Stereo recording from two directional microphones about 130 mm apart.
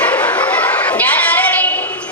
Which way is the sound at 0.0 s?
10° left (ahead or behind).